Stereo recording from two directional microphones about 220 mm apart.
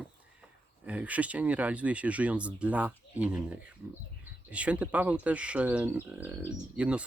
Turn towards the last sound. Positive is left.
turn(degrees=-5)  # may be behind; listen again after turning